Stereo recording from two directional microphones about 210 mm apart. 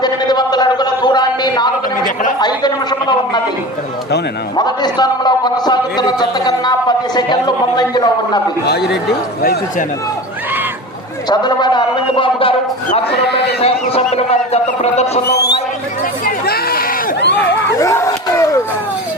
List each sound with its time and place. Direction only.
0.0 s a sound: 20° left (ahead or behind)
2.4 s a man's voice: 20° left (ahead or behind)
4.5 s a man's voice: 20° left (ahead or behind)
8.6 s speech: 50° left (ahead or behind)
11.3 s a man's voice: 20° left (ahead or behind)
13.2 s speech: 55° left (ahead or behind)
13.6 s a man's voice: 30° left (ahead or behind)
15.3 s music: 50° left (ahead or behind)
16.2 s chatter: 45° left (ahead or behind)
17.3 s a sound: 15° left (ahead or behind)